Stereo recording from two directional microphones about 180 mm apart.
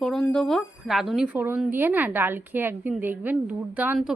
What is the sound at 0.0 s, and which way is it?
Speech, 5° left (ahead or behind).